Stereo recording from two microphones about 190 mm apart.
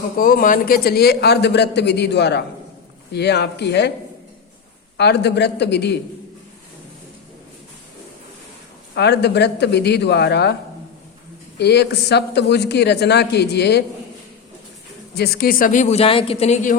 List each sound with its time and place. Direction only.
0.2 s a man's voice: 45° left (ahead or behind)
4.9 s a man's voice: 60° left (ahead or behind)
9.0 s a man's voice: 60° left (ahead or behind)
11.5 s a man's voice: 60° left (ahead or behind)
15.1 s a man's voice: 55° left (ahead or behind); by 16.7 s 35° left (ahead or behind)